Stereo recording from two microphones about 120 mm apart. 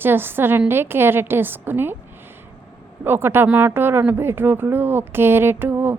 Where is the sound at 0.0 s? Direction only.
20° right (ahead or behind).